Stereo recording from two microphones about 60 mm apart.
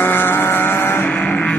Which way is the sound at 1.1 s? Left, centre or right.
Left.